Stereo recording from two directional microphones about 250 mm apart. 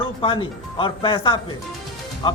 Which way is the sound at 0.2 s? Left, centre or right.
Left.